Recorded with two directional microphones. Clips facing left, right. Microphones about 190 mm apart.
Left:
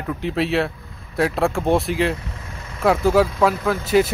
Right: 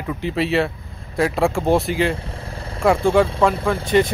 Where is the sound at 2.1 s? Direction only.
30° right (ahead or behind).